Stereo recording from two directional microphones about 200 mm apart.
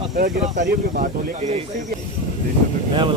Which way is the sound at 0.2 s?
40° right (ahead or behind).